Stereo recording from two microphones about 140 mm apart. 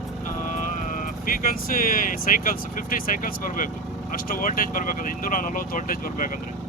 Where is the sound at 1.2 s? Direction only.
85° left.